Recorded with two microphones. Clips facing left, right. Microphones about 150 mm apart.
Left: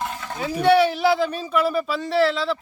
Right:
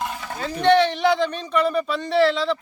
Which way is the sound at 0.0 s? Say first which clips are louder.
Even; 10° right (ahead or behind).